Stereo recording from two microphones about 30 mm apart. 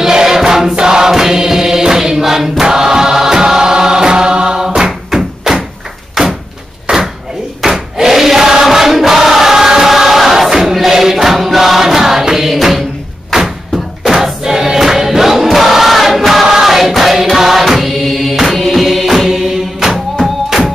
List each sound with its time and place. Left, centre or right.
0.0 s choir: centre
0.7 s chant: right
2.6 s chant: right
4.6 s choir: centre
6.2 s door: centre
6.9 s door: right
7.6 s crowd: centre
8.6 s choir: centre
14.0 s choir: centre
17.4 s music: centre